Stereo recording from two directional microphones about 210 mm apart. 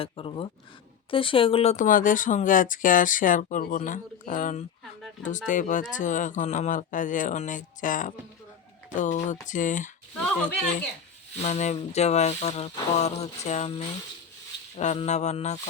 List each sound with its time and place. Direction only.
0.0 s speech: 25° left (ahead or behind)
11.3 s speech: 35° left (ahead or behind)